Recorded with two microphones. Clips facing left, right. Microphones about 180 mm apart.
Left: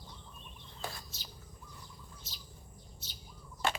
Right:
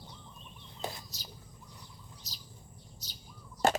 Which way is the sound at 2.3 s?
40° right (ahead or behind).